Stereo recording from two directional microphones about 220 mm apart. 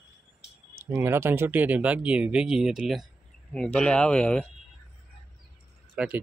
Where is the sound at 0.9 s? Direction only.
10° right (ahead or behind); by 4.4 s 5° left (ahead or behind).